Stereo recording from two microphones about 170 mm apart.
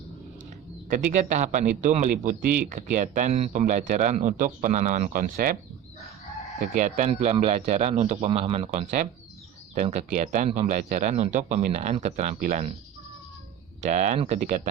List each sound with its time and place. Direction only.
0.9 s speech: 50° right (ahead or behind)
6.6 s speech: 45° right (ahead or behind)
13.8 s speech: 45° right (ahead or behind)